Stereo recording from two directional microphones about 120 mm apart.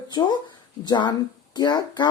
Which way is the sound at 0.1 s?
35° left (ahead or behind).